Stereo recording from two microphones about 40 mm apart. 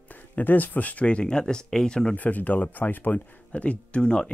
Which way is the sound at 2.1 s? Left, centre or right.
Left.